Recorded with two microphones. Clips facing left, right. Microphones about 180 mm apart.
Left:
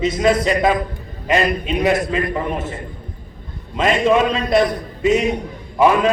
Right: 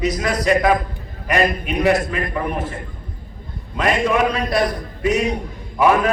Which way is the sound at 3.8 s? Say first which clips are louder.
Left 2 dB; 25° left (ahead or behind).